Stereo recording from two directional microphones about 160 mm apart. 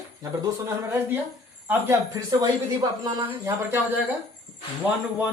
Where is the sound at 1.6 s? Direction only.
15° right (ahead or behind).